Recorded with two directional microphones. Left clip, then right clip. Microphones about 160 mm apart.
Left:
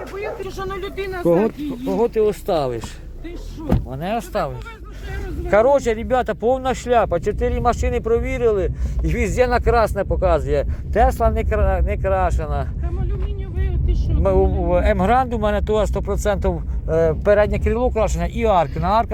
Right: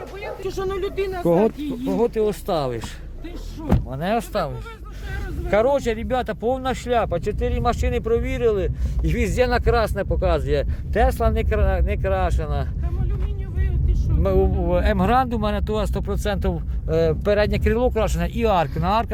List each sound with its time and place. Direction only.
0.4 s speech: 90° right
1.5 s speech: 10° right (ahead or behind)
2.0 s speech: 5° left (ahead or behind)
2.2 s speech: 15° right (ahead or behind)
4.0 s speech: 30° right (ahead or behind)
5.7 s speech: centre (ahead or behind)
7.3 s speech: 20° right (ahead or behind); by 11.0 s 40° right (ahead or behind)
11.2 s speech: 25° right (ahead or behind)
11.4 s speech: 45° right (ahead or behind)
14.2 s speech: 45° right (ahead or behind)
15.4 s speech: 15° right (ahead or behind)
16.9 s speech: 45° right (ahead or behind)
18.7 s speech: 30° right (ahead or behind)